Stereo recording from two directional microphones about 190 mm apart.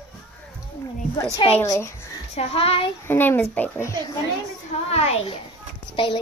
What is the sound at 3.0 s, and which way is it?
Speech, 10° left (ahead or behind).